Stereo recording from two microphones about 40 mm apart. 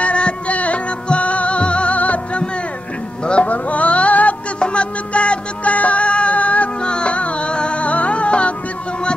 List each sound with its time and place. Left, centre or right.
0.0 s music: left
3.3 s a sound: left
4.6 s music: left
6.8 s music: left